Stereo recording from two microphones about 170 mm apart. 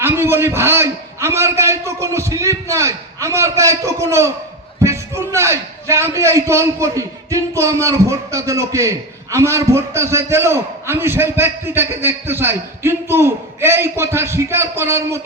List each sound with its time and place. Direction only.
0.0 s a man's voice: 15° right (ahead or behind)